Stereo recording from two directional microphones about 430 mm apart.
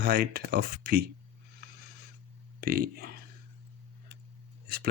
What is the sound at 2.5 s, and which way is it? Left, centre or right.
Speech, right.